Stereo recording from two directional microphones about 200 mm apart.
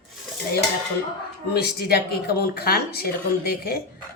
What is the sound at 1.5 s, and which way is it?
Speech, 50° left (ahead or behind).